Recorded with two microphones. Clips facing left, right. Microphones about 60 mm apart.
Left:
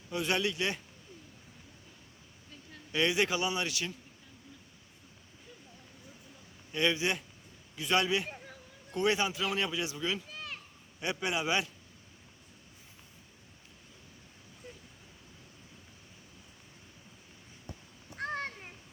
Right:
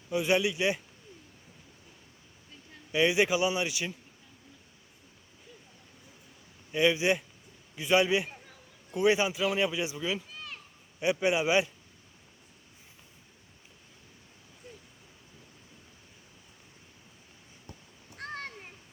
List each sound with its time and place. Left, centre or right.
0.1 s speech: centre
2.9 s speech: centre
6.7 s a man's voice: centre
17.7 s a sound: centre